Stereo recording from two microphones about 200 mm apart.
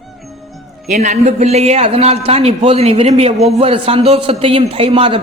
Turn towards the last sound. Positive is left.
turn(degrees=-25)  # may be behind; listen again after turning